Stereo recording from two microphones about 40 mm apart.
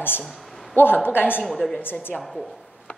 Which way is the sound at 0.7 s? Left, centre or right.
Left.